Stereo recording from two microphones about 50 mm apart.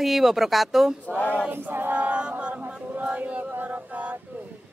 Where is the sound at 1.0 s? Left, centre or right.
Left.